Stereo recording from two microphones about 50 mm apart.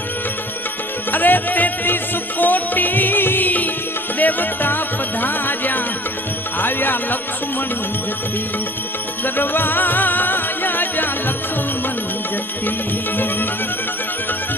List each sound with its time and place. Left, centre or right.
1.1 s music: left
9.2 s music: left